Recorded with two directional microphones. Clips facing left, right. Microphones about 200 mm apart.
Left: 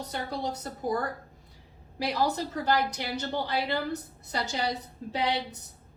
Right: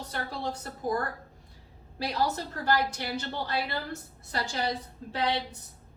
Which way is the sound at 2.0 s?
15° left (ahead or behind).